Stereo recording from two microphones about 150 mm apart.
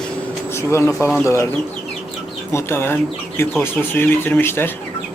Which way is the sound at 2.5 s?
15° left (ahead or behind).